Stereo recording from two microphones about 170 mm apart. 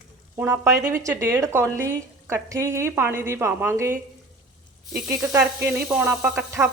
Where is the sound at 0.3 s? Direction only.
15° right (ahead or behind).